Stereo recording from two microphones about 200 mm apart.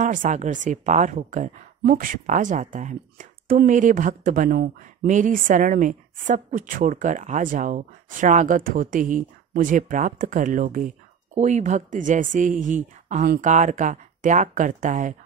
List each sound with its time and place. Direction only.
0.0 s speech: 40° right (ahead or behind)